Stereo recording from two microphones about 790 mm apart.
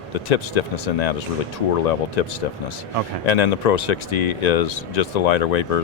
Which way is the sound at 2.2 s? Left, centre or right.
Left.